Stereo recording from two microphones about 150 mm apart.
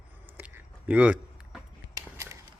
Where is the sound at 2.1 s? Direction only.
20° right (ahead or behind).